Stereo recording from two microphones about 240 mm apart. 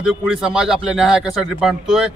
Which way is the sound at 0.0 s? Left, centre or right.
Centre.